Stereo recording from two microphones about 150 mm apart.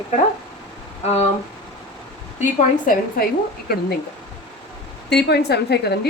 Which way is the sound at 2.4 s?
60° left (ahead or behind).